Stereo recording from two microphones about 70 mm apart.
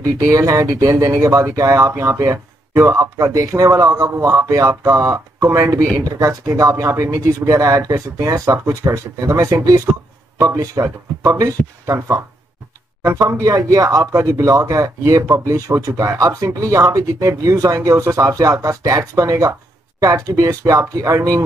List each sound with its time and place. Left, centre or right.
0.0 s speech: right